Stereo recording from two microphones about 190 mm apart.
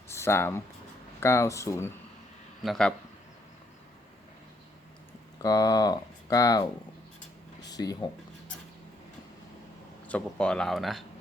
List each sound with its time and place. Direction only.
0.1 s speech: 15° left (ahead or behind)
2.6 s speech: centre (ahead or behind)
5.4 s speech: 20° left (ahead or behind)
7.6 s a sound: 20° left (ahead or behind)
10.1 s speech: 5° left (ahead or behind)